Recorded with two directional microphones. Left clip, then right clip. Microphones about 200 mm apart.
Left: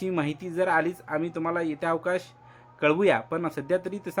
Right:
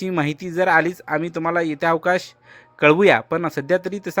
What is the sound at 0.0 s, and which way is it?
Speech, 40° right (ahead or behind).